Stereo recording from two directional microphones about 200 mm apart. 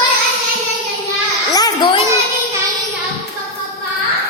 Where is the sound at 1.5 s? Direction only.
20° left (ahead or behind).